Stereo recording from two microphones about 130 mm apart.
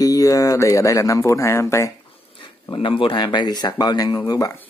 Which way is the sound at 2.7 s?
40° left (ahead or behind).